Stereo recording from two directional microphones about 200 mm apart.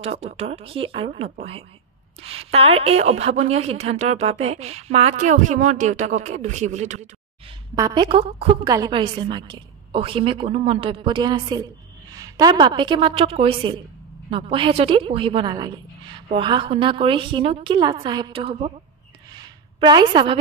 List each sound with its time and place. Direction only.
0.0 s a woman's voice: 30° right (ahead or behind)
7.7 s a woman's voice: 20° right (ahead or behind)
19.3 s a sound: 20° right (ahead or behind)